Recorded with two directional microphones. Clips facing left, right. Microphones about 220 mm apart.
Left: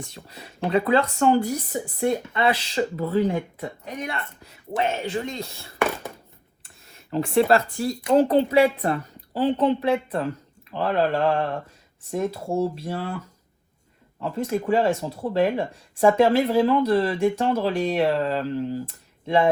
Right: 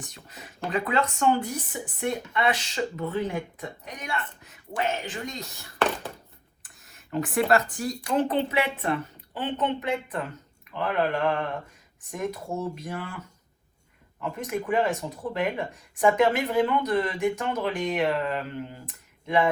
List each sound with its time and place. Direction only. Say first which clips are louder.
0.0 s speech: left 4 dB; 30° left (ahead or behind)
7.1 s speech: left 4 dB; 30° left (ahead or behind)
12.1 s speech: left 6 dB; 30° left (ahead or behind)